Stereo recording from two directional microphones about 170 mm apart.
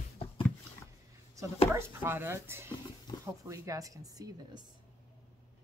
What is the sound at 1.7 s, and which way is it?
Speech, 15° right (ahead or behind).